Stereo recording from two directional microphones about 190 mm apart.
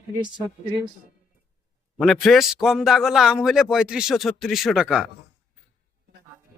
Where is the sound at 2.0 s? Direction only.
Centre (ahead or behind).